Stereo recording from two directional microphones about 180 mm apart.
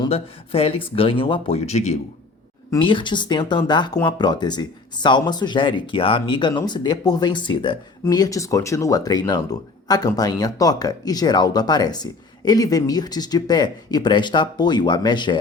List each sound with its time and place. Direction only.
0.0 s speech: 30° left (ahead or behind)
2.6 s speech: 25° left (ahead or behind)